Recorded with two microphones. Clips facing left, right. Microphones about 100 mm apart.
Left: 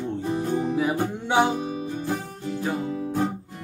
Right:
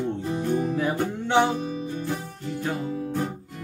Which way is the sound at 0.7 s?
10° left (ahead or behind).